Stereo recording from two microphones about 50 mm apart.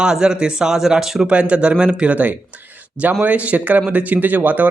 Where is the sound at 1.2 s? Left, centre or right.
Right.